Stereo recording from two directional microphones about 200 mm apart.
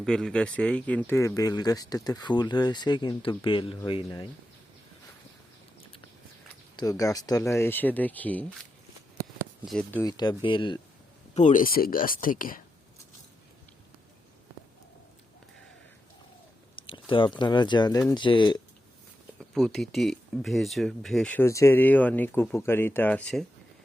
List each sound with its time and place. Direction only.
0.0 s speech: 5° left (ahead or behind); by 4.3 s 20° left (ahead or behind)
6.7 s speech: 15° left (ahead or behind)
9.6 s speech: 5° left (ahead or behind)
10.0 s speech: 20° left (ahead or behind)
11.3 s speech: 40° left (ahead or behind)
16.7 s speech: 25° left (ahead or behind)
19.4 s speech: 5° left (ahead or behind)